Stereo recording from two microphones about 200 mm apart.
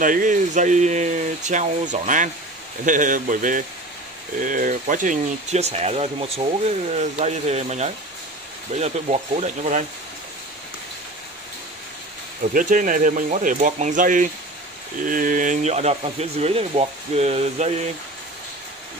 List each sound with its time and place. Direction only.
0.0 s speech: 40° right (ahead or behind)
12.5 s speech: 40° right (ahead or behind)